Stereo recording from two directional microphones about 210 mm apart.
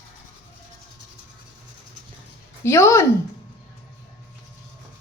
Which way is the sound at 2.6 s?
10° left (ahead or behind).